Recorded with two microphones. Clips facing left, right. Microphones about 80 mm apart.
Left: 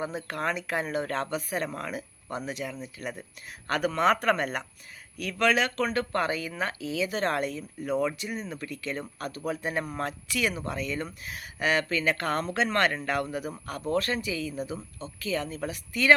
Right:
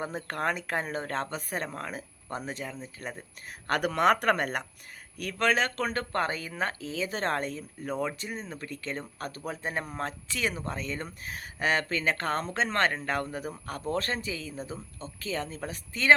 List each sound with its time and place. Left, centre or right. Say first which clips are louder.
0.3 s speech: right 2 dB; right
3.7 s speech: even; right